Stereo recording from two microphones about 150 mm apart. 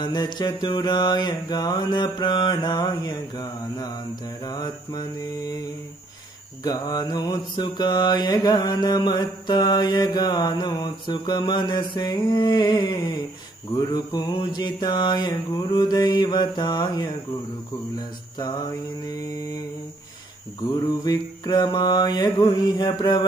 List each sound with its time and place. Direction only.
0.0 s mantra: 30° left (ahead or behind)
6.6 s mantra: 25° left (ahead or behind)
18.4 s mantra: 25° left (ahead or behind)
20.8 s mantra: 25° left (ahead or behind)